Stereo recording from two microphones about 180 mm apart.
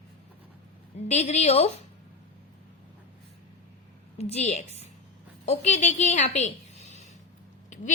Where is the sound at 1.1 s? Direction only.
40° left (ahead or behind).